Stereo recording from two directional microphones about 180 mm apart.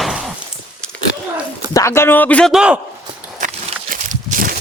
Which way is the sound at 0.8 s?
5° left (ahead or behind).